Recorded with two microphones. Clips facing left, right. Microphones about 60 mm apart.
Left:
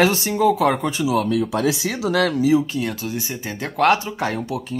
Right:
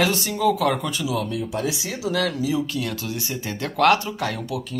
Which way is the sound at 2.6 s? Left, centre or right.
Left.